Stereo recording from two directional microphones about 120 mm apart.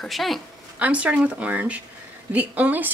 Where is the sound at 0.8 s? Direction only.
10° right (ahead or behind).